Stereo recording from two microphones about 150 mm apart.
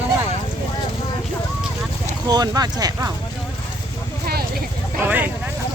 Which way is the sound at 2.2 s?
25° right (ahead or behind).